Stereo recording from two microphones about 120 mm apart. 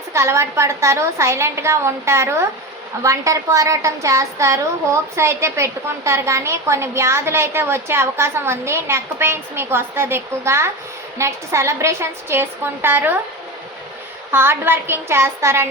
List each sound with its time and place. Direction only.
0.1 s a woman's voice: 25° right (ahead or behind)
14.3 s a woman's voice: 20° right (ahead or behind)